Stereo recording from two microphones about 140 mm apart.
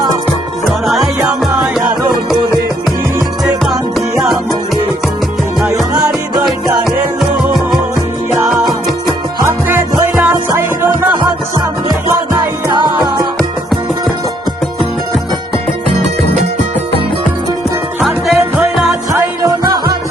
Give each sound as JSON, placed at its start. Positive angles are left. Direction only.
{"t": 0.9, "sound": "music", "side_deg": 0}
{"t": 3.6, "sound": "music", "side_deg": 0}
{"t": 6.1, "sound": "music", "side_deg": -5}
{"t": 9.5, "sound": "music", "side_deg": -15}
{"t": 18.0, "sound": "music", "side_deg": 0}
{"t": 19.1, "sound": "music", "side_deg": -20}